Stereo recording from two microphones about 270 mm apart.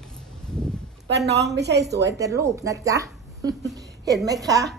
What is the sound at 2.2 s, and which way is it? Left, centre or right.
Speech, centre.